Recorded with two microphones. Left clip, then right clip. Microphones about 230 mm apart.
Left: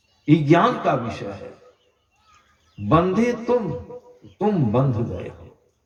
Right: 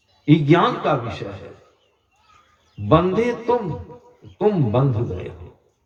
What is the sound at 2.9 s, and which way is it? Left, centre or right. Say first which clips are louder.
A man's voice: right 2 dB; right.